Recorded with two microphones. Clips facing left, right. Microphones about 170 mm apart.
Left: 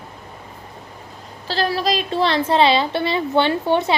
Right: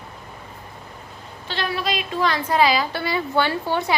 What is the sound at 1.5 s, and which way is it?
A woman's voice, 35° left (ahead or behind).